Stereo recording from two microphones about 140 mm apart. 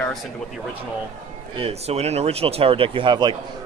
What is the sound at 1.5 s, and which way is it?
Speech, 45° right (ahead or behind).